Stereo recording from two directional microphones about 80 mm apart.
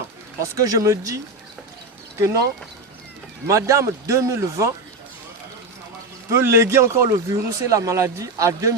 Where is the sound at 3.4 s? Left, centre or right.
Right.